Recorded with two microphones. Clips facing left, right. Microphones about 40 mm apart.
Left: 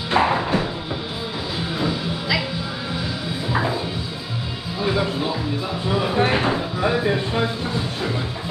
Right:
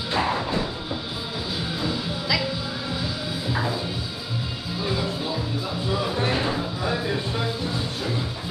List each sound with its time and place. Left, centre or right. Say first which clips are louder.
0.1 s music: left 6 dB; left
1.8 s music: left 3 dB; centre
4.8 s music: left 6 dB; left